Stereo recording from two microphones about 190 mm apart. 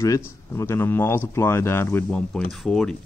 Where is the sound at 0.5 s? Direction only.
15° left (ahead or behind).